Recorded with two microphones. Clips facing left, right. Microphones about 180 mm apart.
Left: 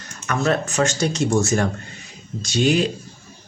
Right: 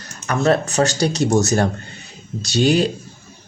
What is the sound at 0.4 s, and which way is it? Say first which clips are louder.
Speech: right 4 dB; 35° right (ahead or behind).